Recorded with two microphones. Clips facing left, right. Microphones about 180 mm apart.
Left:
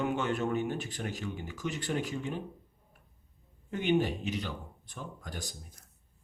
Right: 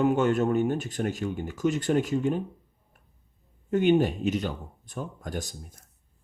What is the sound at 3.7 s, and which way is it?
Speech, 50° right (ahead or behind).